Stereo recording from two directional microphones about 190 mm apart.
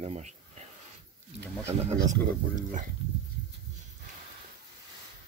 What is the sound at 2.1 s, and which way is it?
Speech, 40° right (ahead or behind).